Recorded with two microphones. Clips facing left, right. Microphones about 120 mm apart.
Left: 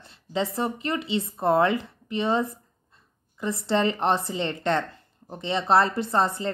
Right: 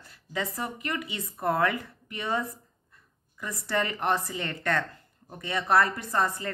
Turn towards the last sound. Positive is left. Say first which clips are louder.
# left 4 dB
turn(degrees=25)  # may be behind; listen again after turning